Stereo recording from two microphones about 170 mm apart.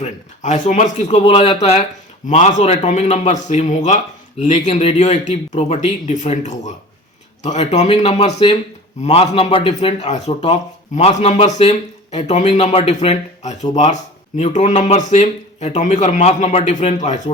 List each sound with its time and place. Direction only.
0.0 s speech: 45° left (ahead or behind)